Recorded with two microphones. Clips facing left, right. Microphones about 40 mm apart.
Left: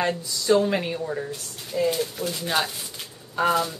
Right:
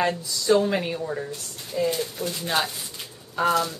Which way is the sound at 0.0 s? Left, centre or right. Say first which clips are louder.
Right 1 dB; centre.